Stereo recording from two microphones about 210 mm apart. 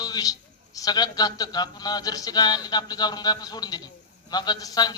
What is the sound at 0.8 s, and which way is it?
A man's voice, 15° left (ahead or behind).